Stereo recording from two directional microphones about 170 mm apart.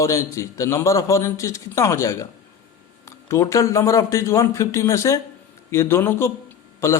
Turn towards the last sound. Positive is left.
turn(degrees=15)  # may be behind; listen again after turning